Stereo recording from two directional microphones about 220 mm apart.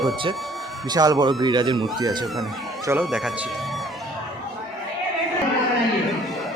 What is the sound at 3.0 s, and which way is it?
Speech, centre (ahead or behind).